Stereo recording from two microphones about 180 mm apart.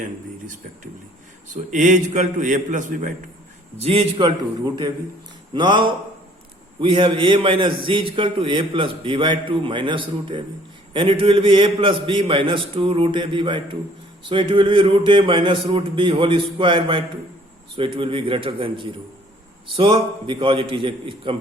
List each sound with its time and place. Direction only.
0.0 s a man's voice: 45° right (ahead or behind)
3.8 s a man's voice: 30° right (ahead or behind)